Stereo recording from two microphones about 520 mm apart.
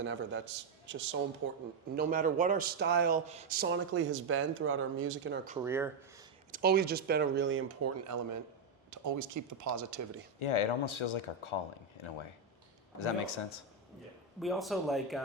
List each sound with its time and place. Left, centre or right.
0.0 s speech: right
5.5 s a man's voice: centre
6.5 s speech: centre
10.4 s speech: left
14.3 s a man's voice: centre